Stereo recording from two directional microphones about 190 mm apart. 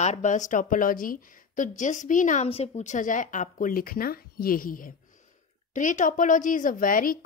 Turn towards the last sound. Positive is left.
turn(degrees=45)  # may be behind; listen again after turning